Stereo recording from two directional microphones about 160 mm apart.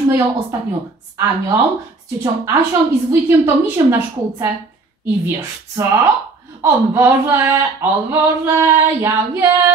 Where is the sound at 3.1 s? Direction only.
15° right (ahead or behind).